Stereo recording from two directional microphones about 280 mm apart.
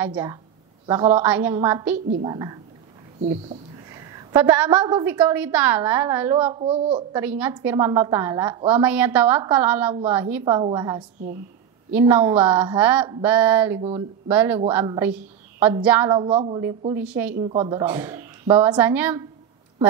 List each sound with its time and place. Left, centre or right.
0.0 s a woman's voice: centre
1.2 s a woman's voice: centre
4.3 s a woman's voice: centre
5.2 s a woman's voice: centre
6.5 s speech: centre
7.2 s a woman's voice: centre
12.4 s a woman's voice: centre
13.8 s speech: centre
14.3 s a woman's voice: centre
17.4 s a woman's voice: centre